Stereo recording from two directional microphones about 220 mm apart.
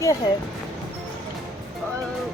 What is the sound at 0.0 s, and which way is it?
Speech, 15° left (ahead or behind).